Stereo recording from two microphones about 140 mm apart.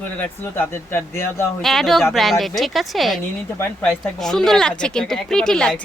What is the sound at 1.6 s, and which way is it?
Speech, centre (ahead or behind).